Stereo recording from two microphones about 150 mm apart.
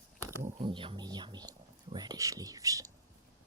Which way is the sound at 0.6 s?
35° right (ahead or behind).